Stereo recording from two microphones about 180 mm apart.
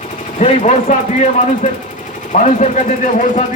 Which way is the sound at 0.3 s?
40° left (ahead or behind).